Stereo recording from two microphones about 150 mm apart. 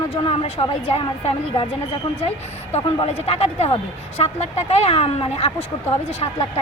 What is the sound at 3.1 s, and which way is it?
Speech, 45° left (ahead or behind).